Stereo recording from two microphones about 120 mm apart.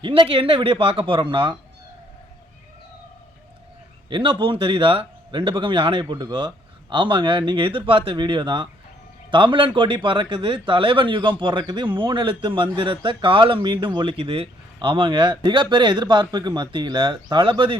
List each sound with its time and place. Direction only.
0.0 s speech: 45° right (ahead or behind)
4.1 s speech: 45° right (ahead or behind)